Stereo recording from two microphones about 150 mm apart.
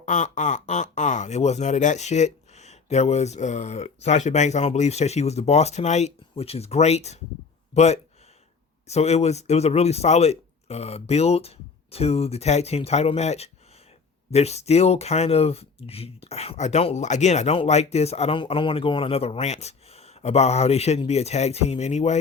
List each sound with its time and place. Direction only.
0.0 s speech: 55° left (ahead or behind)